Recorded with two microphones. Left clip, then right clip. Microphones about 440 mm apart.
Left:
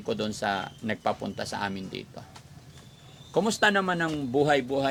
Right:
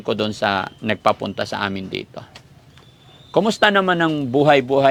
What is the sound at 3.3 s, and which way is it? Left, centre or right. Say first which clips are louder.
Speech: right 8 dB; centre.